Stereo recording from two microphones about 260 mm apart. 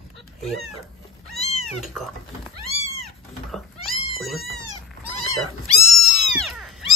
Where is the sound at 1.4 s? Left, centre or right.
Left.